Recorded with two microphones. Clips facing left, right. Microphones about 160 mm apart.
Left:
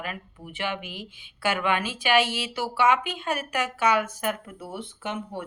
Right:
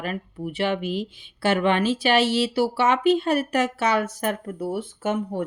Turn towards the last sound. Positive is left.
turn(degrees=-40)  # may be behind; listen again after turning